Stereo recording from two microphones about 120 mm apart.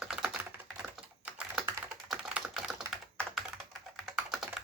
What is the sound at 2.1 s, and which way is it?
Typing, 5° right (ahead or behind).